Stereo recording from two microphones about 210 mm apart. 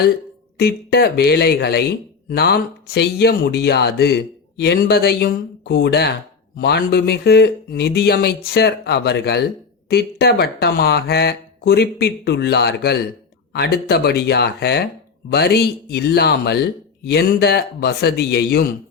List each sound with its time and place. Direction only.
0.6 s speech: 50° left (ahead or behind)